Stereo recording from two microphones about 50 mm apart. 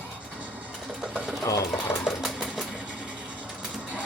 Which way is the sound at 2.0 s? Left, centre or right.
Centre.